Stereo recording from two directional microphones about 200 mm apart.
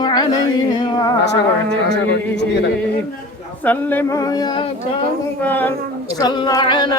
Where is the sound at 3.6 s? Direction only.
10° left (ahead or behind).